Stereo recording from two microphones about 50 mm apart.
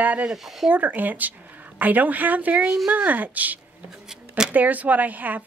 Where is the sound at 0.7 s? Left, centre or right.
Right.